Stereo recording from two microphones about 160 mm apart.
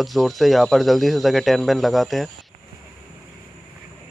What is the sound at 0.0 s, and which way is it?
Speech, centre (ahead or behind).